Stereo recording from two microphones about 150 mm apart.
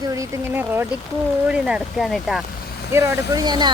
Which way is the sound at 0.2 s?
15° right (ahead or behind).